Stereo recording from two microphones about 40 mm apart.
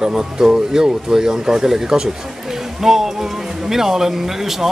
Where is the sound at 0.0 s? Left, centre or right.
Centre.